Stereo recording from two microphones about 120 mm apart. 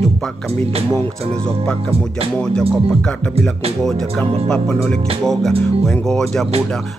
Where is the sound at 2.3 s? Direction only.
5° left (ahead or behind).